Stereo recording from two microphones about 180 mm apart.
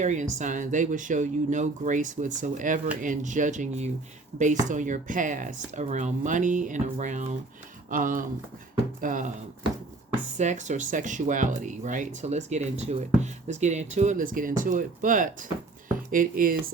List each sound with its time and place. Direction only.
0.0 s speech: 40° right (ahead or behind)
10.3 s speech: 40° right (ahead or behind)